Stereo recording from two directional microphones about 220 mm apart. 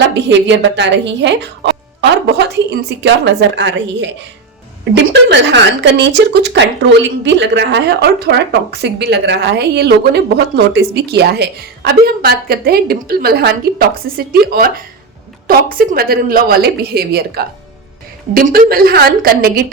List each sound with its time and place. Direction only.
0.1 s a woman's voice: 55° right (ahead or behind)